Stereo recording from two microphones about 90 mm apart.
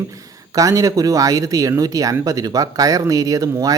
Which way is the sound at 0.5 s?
40° right (ahead or behind).